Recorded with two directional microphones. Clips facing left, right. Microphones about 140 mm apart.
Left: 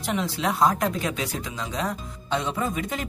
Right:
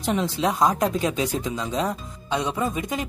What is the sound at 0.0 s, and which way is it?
Speech, 20° right (ahead or behind).